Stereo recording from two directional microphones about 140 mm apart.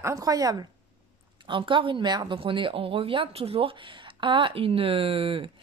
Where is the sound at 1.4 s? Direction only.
35° right (ahead or behind).